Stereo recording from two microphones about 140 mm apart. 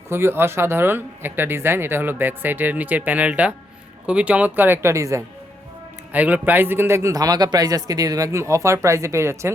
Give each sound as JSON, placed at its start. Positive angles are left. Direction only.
{"t": 0.1, "sound": "speech", "side_deg": -15}
{"t": 6.1, "sound": "speech", "side_deg": -10}